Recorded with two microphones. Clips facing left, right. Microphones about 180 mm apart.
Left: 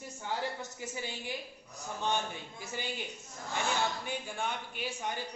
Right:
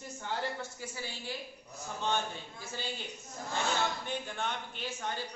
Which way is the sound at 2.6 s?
15° left (ahead or behind).